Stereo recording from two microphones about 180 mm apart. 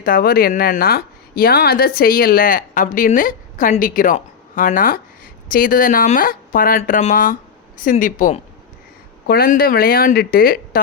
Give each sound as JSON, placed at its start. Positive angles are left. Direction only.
{"t": 0.0, "sound": "speech", "side_deg": 50}